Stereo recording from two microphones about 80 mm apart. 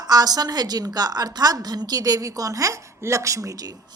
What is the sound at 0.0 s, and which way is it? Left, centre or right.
A woman's voice, right.